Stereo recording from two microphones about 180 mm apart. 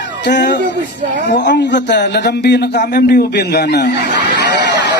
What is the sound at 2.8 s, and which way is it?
Speech, 55° left (ahead or behind).